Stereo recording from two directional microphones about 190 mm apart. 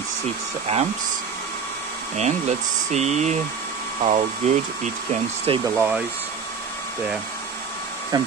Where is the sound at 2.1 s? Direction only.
35° right (ahead or behind).